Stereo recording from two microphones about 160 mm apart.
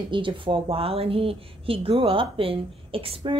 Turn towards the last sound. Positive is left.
turn(degrees=-35)  # may be behind; listen again after turning